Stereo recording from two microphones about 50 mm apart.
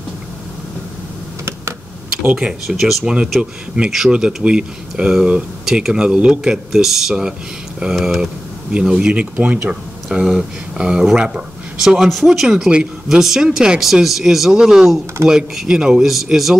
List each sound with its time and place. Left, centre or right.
2.6 s speech: centre
3.1 s speech: centre
9.1 s speech: right
10.2 s speech: centre
11.8 s speech: centre
16.1 s speech: centre